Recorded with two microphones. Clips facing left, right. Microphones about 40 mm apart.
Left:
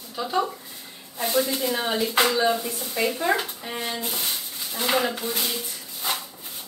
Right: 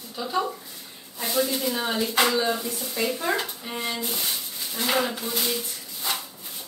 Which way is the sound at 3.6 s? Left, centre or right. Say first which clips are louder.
Even; centre.